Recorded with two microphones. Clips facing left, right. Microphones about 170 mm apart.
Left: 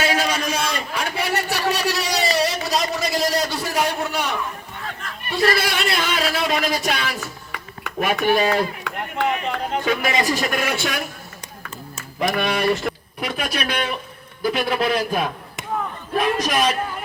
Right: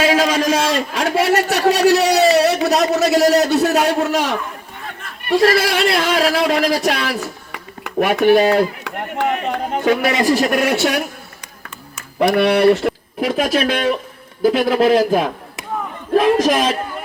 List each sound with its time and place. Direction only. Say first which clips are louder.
0.0 s a sound: right 7 dB; 90° right
7.9 s chop: right 7 dB; 75° right (ahead or behind)
12.2 s speech: right 8 dB; 70° right (ahead or behind)
13.2 s speech: right 9 dB; 45° right (ahead or behind)
14.9 s a man's voice: right 7 dB; 90° right